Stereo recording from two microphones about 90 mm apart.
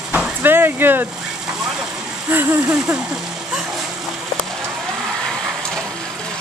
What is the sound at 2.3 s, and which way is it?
Speech, 20° right (ahead or behind).